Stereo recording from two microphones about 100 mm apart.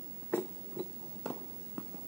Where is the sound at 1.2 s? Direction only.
Centre (ahead or behind).